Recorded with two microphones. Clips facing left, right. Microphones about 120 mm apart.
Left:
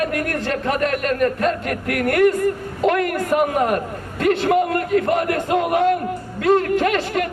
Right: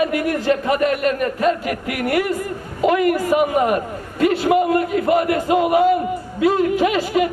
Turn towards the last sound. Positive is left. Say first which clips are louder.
# right 2 dB
turn(degrees=-5)  # may be behind; listen again after turning